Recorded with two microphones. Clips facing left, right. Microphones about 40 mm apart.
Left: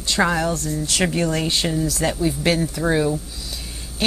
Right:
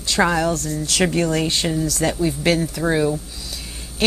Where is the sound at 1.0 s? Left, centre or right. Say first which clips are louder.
Right 2 dB; centre.